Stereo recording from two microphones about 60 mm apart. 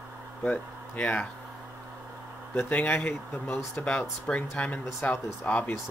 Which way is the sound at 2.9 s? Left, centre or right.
Left.